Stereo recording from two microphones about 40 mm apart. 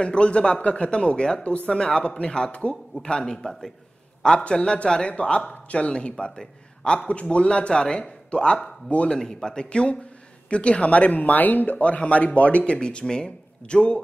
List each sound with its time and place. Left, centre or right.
0.0 s a man's voice: left
12.7 s a man's voice: left